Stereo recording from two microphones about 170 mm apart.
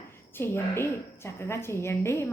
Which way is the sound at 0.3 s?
15° left (ahead or behind).